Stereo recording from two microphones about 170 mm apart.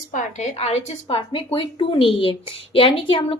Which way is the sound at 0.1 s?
45° left (ahead or behind).